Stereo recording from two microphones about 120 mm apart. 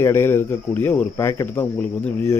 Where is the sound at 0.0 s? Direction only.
20° left (ahead or behind).